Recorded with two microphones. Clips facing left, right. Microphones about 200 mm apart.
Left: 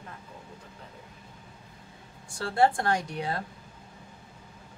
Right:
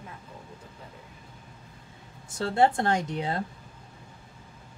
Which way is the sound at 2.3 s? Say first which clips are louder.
Right 1 dB; 20° right (ahead or behind).